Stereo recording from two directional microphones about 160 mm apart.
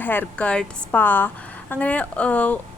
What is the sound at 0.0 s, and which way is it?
Speech, 10° left (ahead or behind).